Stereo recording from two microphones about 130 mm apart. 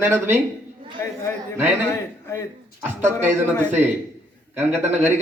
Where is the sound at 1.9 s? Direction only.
20° left (ahead or behind).